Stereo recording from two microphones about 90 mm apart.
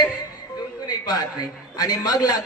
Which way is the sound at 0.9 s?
50° left (ahead or behind).